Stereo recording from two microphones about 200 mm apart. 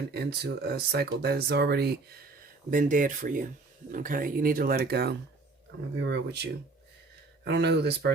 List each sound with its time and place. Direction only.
0.1 s speech: 55° right (ahead or behind)
2.6 s speech: 40° right (ahead or behind)